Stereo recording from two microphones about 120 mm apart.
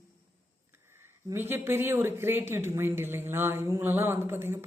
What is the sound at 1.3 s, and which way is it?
A woman's voice, 20° right (ahead or behind).